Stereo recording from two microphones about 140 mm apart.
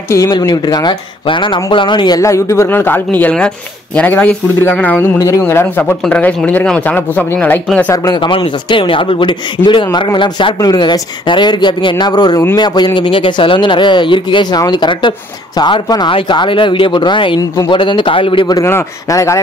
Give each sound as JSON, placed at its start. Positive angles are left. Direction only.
{"t": 0.4, "sound": "speech", "side_deg": 30}
{"t": 7.9, "sound": "speech", "side_deg": 25}
{"t": 17.4, "sound": "speech", "side_deg": 25}
{"t": 17.7, "sound": "speech", "side_deg": 35}
{"t": 18.6, "sound": "speech", "side_deg": 20}